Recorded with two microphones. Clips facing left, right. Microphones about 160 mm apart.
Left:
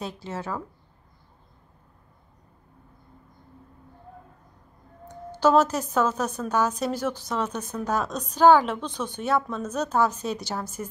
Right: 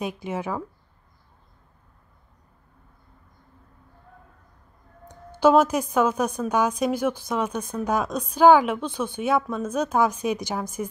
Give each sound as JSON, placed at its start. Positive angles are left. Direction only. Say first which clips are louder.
{"t": 0.0, "sound": "a woman's voice", "louder": "right 4 dB", "side_deg": -15}
{"t": 5.0, "sound": "a woman's voice", "louder": "right 3 dB", "side_deg": -10}